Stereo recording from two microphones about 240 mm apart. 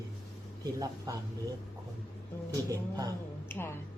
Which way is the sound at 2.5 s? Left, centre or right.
Centre.